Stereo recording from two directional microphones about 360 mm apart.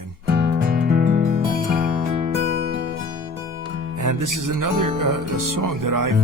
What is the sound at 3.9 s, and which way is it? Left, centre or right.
Music, right.